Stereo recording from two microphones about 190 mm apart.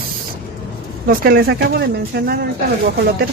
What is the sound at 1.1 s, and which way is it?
Speech, 50° right (ahead or behind).